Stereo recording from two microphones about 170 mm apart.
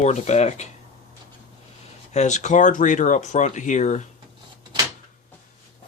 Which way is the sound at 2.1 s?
45° left (ahead or behind).